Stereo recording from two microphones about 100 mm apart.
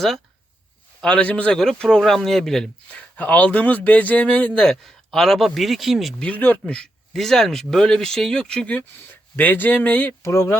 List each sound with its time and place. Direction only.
1.0 s a man's voice: 10° left (ahead or behind)
3.2 s speech: 15° left (ahead or behind); by 6.2 s centre (ahead or behind)
6.2 s speech: 15° left (ahead or behind)